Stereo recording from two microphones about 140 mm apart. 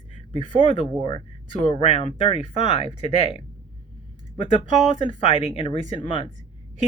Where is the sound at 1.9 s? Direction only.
45° left (ahead or behind).